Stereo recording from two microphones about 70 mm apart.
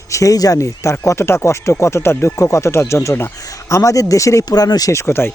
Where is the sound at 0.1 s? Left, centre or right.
Left.